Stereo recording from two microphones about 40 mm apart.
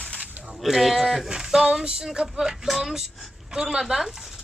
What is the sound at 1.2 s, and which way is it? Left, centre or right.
Speech, centre.